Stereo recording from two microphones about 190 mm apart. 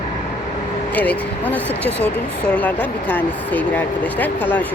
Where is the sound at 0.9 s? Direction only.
10° left (ahead or behind).